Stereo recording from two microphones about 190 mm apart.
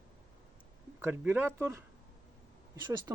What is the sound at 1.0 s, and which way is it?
Speech, 10° right (ahead or behind).